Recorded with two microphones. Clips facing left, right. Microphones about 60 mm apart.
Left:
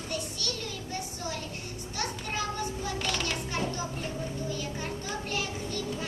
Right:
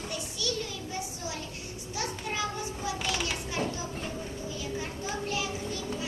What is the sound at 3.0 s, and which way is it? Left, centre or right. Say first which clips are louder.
Children playing: left 1 dB; centre.